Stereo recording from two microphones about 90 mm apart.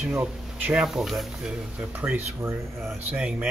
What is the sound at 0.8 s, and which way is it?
Speech, 5° right (ahead or behind).